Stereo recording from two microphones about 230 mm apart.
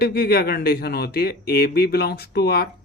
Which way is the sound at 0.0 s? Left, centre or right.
Left.